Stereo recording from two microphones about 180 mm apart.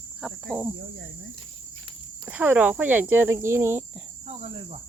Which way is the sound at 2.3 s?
10° right (ahead or behind).